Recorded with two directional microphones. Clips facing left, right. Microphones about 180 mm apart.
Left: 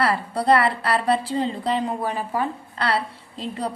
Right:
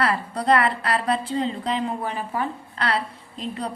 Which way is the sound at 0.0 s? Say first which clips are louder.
Left 2 dB; 30° left (ahead or behind).